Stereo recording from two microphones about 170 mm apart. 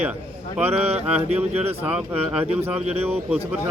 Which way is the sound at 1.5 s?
35° right (ahead or behind).